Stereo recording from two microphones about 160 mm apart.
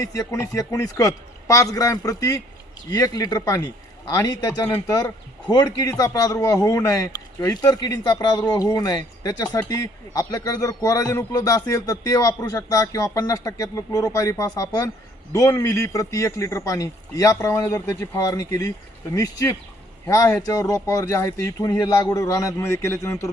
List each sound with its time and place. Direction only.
0.0 s a man's voice: 20° left (ahead or behind)